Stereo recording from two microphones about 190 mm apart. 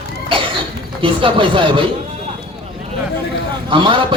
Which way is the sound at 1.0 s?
25° right (ahead or behind).